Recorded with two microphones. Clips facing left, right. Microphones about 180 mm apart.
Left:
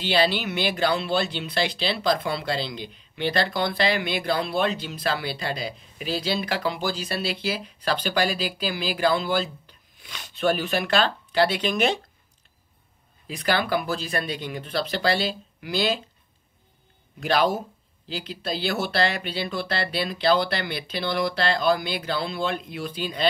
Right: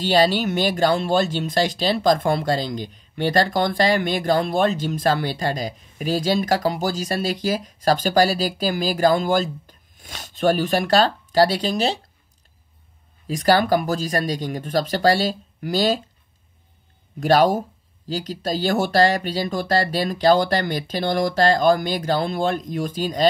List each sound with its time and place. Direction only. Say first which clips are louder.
0.0 s speech: right 5 dB; 45° right (ahead or behind)
13.3 s speech: right 7 dB; 40° right (ahead or behind)
17.2 s speech: right 6 dB; 45° right (ahead or behind)